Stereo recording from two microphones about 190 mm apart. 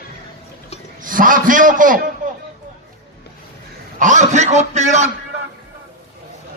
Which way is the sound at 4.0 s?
40° right (ahead or behind).